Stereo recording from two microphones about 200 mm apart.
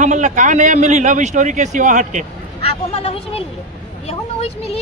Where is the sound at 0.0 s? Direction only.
35° right (ahead or behind).